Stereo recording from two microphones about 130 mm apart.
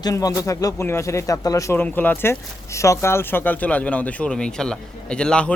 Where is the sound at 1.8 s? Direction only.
15° left (ahead or behind).